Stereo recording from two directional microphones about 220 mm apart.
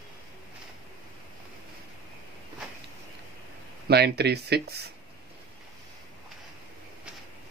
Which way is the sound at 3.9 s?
50° right (ahead or behind).